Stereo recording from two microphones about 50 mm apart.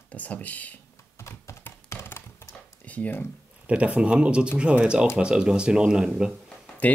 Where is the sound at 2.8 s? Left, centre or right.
Left.